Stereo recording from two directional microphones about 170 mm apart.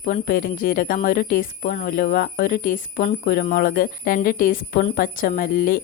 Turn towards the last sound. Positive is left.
turn(degrees=60)  # may be behind; listen again after turning